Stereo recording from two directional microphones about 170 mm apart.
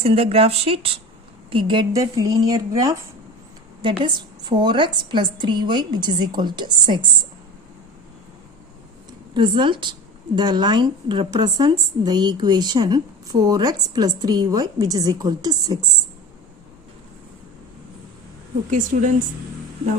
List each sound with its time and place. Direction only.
0.0 s a woman's voice: 35° right (ahead or behind)
9.3 s a woman's voice: 30° right (ahead or behind)
18.7 s a woman's voice: 50° right (ahead or behind)